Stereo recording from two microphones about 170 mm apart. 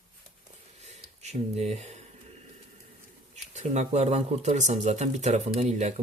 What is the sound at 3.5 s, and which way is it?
Speech, 45° right (ahead or behind).